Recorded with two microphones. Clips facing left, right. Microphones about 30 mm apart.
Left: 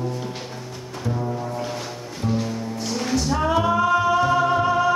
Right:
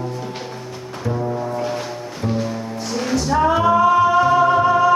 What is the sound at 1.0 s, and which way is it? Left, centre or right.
Foghorn, centre.